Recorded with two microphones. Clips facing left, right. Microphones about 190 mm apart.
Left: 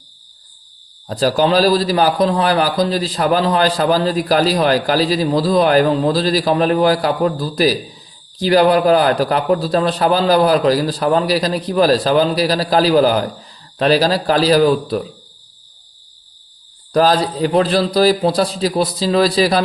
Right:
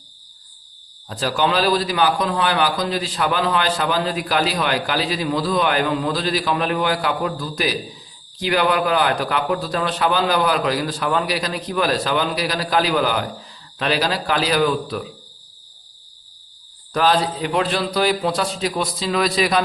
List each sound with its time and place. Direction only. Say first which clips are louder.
1.0 s a man's voice: left 6 dB; 35° left (ahead or behind)
16.9 s a man's voice: left 4 dB; 35° left (ahead or behind)